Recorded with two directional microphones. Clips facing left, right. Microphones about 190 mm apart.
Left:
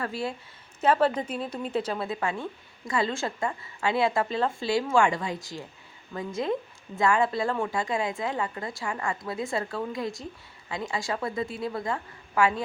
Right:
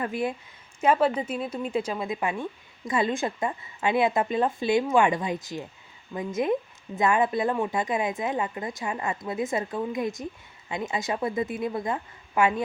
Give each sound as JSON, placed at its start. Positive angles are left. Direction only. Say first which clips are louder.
{"t": 0.0, "sound": "speech", "louder": "right 3 dB", "side_deg": -20}